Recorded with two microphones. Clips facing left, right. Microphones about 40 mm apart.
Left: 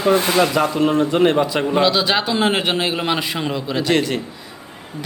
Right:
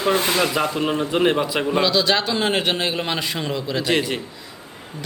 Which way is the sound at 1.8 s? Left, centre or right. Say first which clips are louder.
Left 1 dB; centre.